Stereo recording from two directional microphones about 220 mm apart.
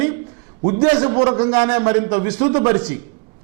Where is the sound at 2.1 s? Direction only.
10° right (ahead or behind).